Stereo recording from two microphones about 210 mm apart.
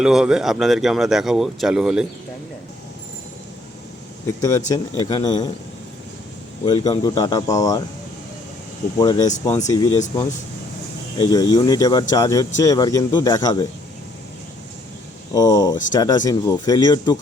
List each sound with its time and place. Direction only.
0.0 s speech: 5° right (ahead or behind)
4.4 s speech: 15° left (ahead or behind)
6.7 s speech: 20° left (ahead or behind)
9.0 s speech: 20° left (ahead or behind)
11.2 s speech: 20° left (ahead or behind)
15.3 s speech: 15° left (ahead or behind)